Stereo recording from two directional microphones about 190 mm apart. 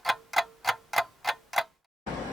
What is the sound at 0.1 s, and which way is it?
Clock, centre (ahead or behind).